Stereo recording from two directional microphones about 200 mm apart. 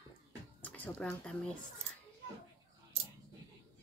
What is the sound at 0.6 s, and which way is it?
Speech, 10° left (ahead or behind).